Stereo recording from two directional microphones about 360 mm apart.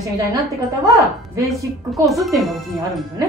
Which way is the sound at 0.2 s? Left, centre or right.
Centre.